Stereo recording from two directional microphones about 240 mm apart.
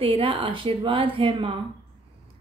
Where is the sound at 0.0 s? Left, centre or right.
Right.